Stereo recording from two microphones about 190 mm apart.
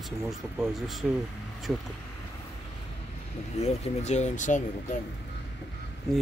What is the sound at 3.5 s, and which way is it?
Speech, 35° left (ahead or behind).